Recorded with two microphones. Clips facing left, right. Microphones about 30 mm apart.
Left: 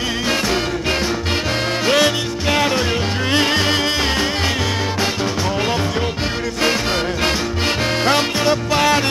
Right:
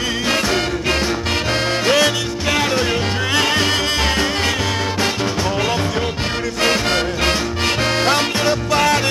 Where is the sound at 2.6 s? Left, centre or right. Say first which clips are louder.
Even; centre.